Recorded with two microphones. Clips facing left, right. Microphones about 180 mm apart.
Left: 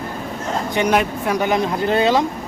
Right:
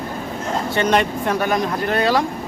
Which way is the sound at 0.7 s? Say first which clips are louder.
Even; 10° left (ahead or behind).